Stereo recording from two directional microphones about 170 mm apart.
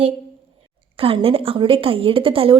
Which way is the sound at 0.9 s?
35° right (ahead or behind).